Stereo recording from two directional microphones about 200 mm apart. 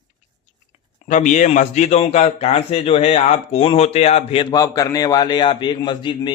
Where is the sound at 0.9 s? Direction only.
35° left (ahead or behind).